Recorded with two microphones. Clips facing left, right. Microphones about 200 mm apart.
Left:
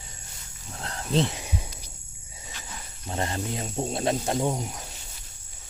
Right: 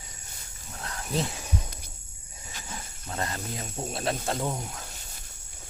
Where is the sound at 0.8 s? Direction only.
30° left (ahead or behind).